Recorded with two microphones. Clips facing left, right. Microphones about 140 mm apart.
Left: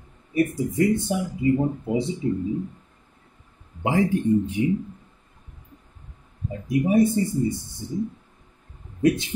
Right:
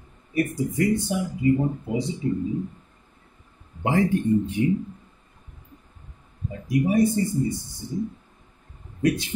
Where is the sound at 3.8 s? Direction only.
10° left (ahead or behind).